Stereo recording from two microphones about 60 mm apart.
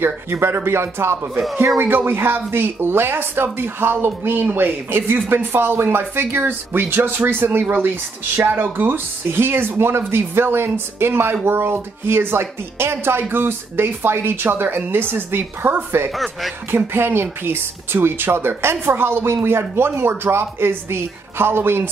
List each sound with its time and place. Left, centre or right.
0.0 s speech: right